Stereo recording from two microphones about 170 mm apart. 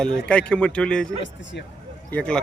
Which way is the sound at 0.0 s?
5° left (ahead or behind).